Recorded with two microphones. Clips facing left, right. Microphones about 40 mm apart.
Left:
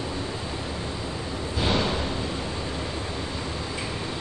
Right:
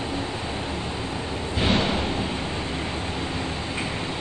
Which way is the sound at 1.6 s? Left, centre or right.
Right.